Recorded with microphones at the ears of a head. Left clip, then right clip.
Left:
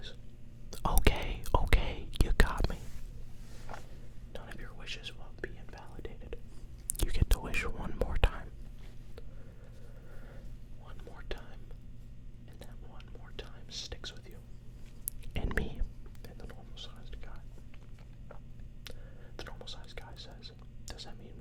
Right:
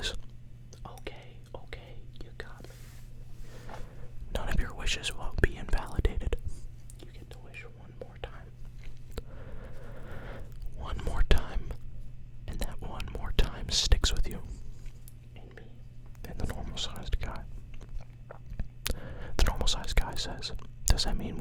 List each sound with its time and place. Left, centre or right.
0.7 s whispering: left
4.3 s whispering: right
6.9 s whispering: left
9.1 s a sound: right
12.5 s whispering: right
15.3 s whispering: left
16.2 s whispering: right
18.5 s whispering: right